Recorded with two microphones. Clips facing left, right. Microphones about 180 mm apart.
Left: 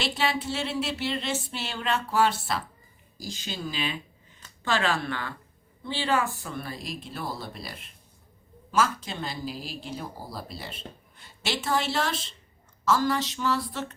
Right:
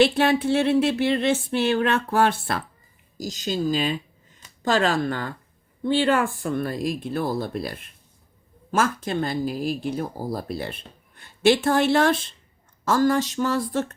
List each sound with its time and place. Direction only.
0.0 s a sound: 55° right (ahead or behind)
3.2 s speech: 40° right (ahead or behind)
5.8 s speech: 55° right (ahead or behind)